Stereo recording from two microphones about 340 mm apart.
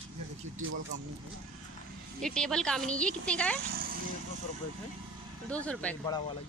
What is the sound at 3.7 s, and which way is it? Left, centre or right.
Vehicle, right.